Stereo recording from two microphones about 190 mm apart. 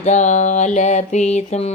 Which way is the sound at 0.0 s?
40° left (ahead or behind).